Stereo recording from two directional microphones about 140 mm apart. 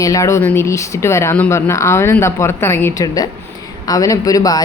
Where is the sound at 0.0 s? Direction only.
25° left (ahead or behind).